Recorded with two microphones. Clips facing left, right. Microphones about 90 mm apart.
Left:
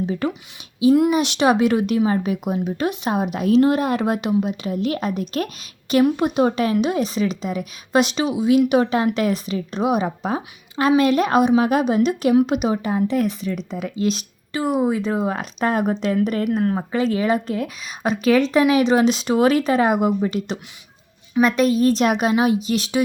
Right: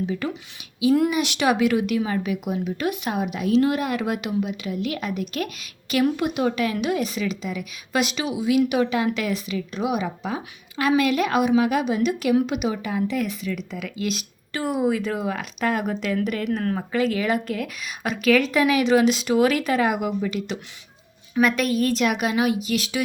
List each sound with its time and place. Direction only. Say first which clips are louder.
0.0 s a woman's voice: left 3 dB; 40° left (ahead or behind)